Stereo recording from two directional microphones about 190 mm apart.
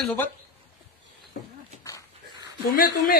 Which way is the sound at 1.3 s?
55° left (ahead or behind).